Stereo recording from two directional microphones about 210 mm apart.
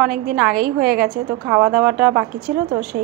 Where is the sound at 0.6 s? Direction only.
45° right (ahead or behind).